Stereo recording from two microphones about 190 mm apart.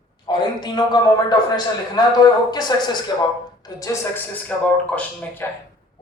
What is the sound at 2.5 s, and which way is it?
Speech, 20° left (ahead or behind).